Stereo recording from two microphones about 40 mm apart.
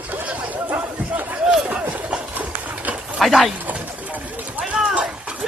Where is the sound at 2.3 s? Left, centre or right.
Right.